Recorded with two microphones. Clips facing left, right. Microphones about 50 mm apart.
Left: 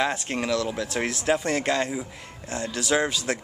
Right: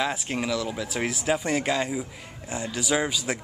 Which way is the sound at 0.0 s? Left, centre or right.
Centre.